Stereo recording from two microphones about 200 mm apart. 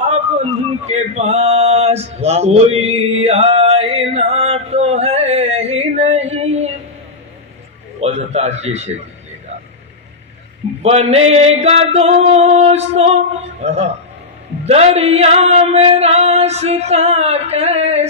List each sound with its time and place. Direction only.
0.0 s male singing: 30° right (ahead or behind)
8.0 s a man's voice: 30° right (ahead or behind)
10.8 s singing: 30° right (ahead or behind)